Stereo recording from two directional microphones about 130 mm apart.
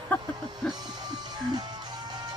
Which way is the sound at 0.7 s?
30° right (ahead or behind).